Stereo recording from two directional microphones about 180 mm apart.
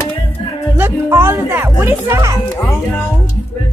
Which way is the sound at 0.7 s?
15° right (ahead or behind).